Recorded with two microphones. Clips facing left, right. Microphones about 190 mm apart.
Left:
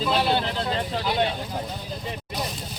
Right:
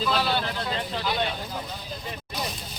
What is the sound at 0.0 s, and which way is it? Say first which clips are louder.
Vehicle: left 3 dB; 25° left (ahead or behind).